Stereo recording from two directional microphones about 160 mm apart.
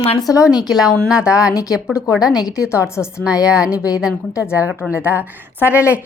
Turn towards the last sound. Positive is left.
turn(degrees=-10)  # may be behind; listen again after turning